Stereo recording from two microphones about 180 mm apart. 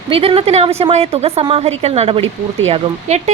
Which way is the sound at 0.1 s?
30° right (ahead or behind).